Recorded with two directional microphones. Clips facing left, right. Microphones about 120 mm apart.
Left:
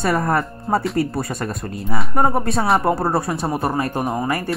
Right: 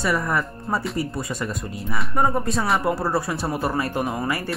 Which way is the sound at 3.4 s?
30° left (ahead or behind).